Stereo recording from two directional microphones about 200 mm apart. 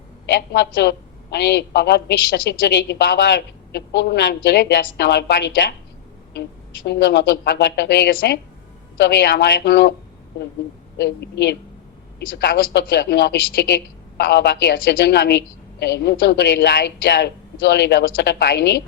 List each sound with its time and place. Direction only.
0.3 s a woman's voice: 55° left (ahead or behind)
6.8 s a woman's voice: 55° left (ahead or behind)
10.9 s a woman's voice: 55° left (ahead or behind)